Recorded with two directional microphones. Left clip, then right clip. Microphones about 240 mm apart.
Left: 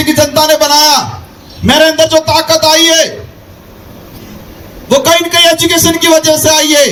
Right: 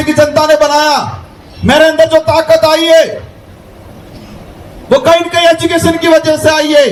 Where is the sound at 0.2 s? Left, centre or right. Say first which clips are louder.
Right 2 dB; left.